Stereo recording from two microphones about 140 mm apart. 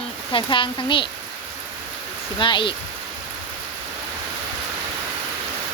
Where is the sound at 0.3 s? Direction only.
35° left (ahead or behind).